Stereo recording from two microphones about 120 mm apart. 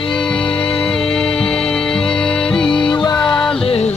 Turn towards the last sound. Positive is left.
turn(degrees=5)  # may be behind; listen again after turning